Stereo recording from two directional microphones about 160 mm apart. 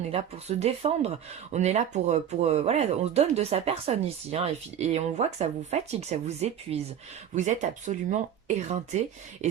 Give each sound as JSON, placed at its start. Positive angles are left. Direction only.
{"t": 0.1, "sound": "speech", "side_deg": -40}